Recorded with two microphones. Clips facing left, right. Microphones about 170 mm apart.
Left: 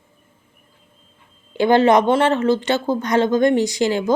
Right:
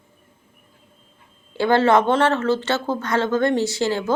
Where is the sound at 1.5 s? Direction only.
15° left (ahead or behind).